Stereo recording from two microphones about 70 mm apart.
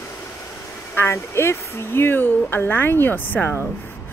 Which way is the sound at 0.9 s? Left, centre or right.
Left.